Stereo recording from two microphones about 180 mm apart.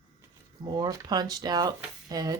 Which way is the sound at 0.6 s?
25° right (ahead or behind).